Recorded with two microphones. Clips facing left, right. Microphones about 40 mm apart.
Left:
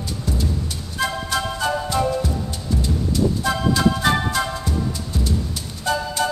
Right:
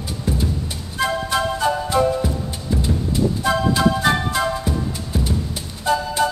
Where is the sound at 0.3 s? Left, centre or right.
Right.